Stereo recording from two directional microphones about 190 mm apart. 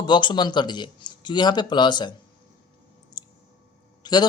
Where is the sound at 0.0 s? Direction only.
25° left (ahead or behind).